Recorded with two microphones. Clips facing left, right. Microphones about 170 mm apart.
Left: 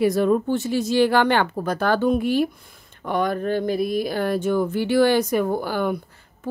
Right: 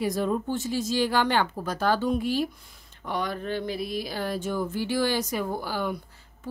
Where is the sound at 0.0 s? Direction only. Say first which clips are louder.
Left 8 dB; 65° left (ahead or behind).